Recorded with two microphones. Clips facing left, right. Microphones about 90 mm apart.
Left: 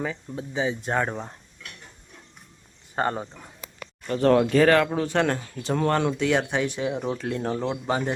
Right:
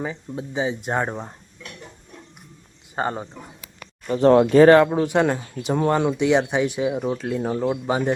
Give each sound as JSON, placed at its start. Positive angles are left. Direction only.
{"t": 0.0, "sound": "speech", "side_deg": -20}
{"t": 2.9, "sound": "speech", "side_deg": -5}
{"t": 4.0, "sound": "speech", "side_deg": -20}
{"t": 4.9, "sound": "speech", "side_deg": -15}